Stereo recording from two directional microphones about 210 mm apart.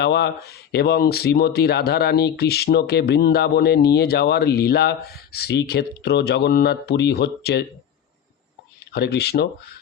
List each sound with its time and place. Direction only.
0.0 s speech: 55° left (ahead or behind)
8.9 s speech: 50° left (ahead or behind)